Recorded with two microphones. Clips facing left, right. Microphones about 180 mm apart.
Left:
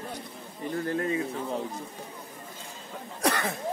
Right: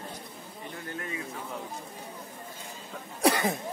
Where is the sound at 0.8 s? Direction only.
35° left (ahead or behind).